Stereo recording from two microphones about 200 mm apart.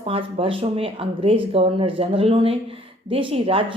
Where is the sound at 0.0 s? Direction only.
30° right (ahead or behind).